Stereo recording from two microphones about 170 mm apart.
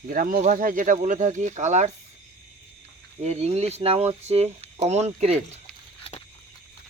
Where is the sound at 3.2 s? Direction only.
40° right (ahead or behind).